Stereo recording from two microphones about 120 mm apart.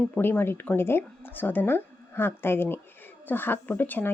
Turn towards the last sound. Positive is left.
turn(degrees=15)  # may be behind; listen again after turning